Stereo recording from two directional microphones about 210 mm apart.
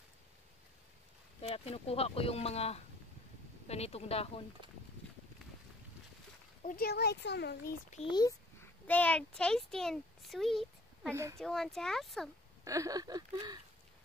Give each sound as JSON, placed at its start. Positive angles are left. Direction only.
{"t": 1.5, "sound": "speech", "side_deg": 30}
{"t": 6.6, "sound": "a child's voice", "side_deg": 40}
{"t": 7.9, "sound": "a child's voice", "side_deg": 25}
{"t": 12.6, "sound": "speech", "side_deg": -15}